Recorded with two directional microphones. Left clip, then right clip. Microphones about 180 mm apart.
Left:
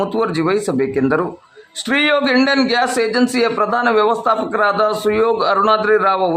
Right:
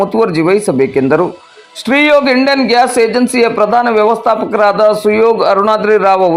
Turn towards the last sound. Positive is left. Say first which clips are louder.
# right 6 dB
turn(degrees=-20)  # may be behind; listen again after turning